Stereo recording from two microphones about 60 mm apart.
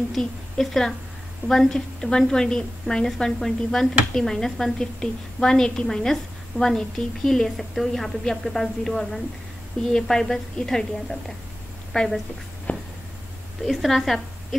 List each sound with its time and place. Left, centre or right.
0.1 s a woman's voice: centre
12.7 s a sound: left
13.7 s a woman's voice: centre